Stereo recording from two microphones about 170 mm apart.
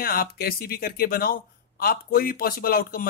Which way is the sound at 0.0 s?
60° left (ahead or behind).